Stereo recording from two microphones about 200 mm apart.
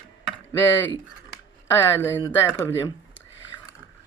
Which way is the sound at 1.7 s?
10° left (ahead or behind).